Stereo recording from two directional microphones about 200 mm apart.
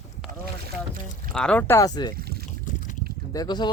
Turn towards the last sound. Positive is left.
turn(degrees=20)  # may be behind; listen again after turning